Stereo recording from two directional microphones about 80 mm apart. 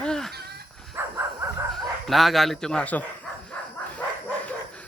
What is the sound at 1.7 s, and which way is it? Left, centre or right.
Speech, centre.